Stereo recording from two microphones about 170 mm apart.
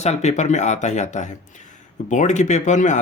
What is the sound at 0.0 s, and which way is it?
Speech, 40° left (ahead or behind).